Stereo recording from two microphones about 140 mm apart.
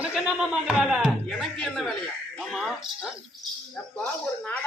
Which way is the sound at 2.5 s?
Centre (ahead or behind).